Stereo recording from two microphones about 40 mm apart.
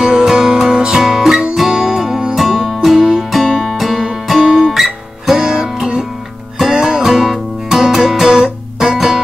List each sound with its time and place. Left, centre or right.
0.0 s music: centre
3.3 s music: centre
6.7 s music: centre
7.0 s guitar: centre
8.9 s music: centre